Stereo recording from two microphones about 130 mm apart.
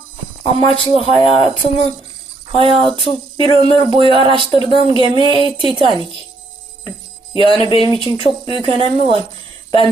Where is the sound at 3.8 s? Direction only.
40° right (ahead or behind).